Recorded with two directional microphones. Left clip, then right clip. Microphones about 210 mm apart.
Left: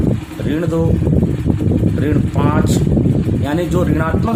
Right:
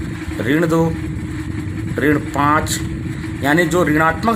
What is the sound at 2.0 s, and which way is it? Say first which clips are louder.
Speech: right 2 dB; 20° right (ahead or behind).